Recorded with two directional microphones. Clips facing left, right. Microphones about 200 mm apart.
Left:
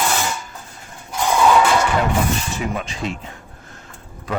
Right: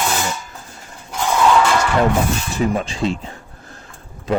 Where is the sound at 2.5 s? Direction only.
35° right (ahead or behind).